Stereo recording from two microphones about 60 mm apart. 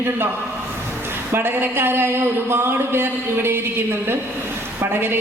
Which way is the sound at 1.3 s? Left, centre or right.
Right.